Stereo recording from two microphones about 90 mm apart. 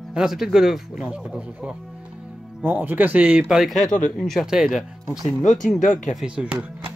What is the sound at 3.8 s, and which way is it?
Speech, 5° left (ahead or behind).